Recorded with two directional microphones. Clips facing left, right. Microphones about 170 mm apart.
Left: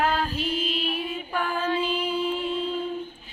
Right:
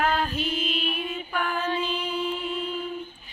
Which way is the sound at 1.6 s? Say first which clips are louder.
Left 2 dB; 10° left (ahead or behind).